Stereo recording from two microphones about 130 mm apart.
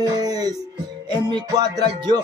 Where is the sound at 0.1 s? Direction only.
30° right (ahead or behind).